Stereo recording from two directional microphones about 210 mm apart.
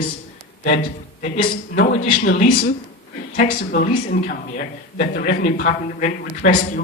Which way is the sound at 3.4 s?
40° left (ahead or behind).